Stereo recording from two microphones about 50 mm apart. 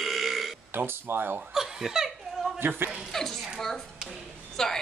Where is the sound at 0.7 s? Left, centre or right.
Right.